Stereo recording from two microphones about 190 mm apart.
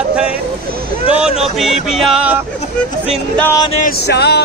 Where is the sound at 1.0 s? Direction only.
5° right (ahead or behind).